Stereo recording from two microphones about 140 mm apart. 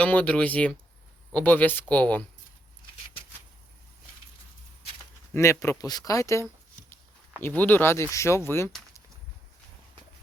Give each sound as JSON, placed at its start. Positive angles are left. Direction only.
{"t": 0.0, "sound": "speech", "side_deg": 10}
{"t": 5.3, "sound": "speech", "side_deg": 20}